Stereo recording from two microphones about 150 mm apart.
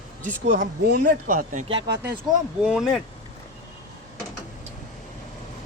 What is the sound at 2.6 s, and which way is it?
Speech, centre (ahead or behind).